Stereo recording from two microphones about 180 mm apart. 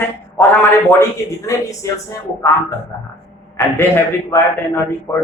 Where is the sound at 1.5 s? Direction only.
15° left (ahead or behind).